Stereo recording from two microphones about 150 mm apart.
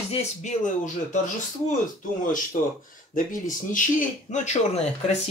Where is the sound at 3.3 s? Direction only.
60° left (ahead or behind).